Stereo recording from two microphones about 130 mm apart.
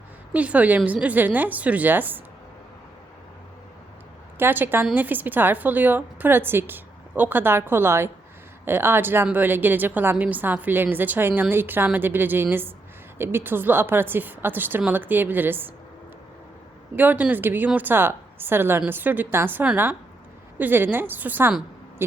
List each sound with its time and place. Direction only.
0.3 s a woman's voice: 10° right (ahead or behind)
4.4 s a woman's voice: 15° right (ahead or behind)
16.9 s a woman's voice: 15° right (ahead or behind)